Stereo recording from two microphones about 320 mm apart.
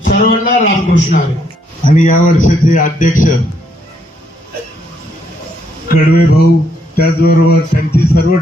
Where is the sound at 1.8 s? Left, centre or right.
Left.